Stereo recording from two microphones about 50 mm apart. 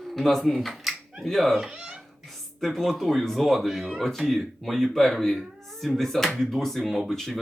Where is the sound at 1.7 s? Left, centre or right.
Centre.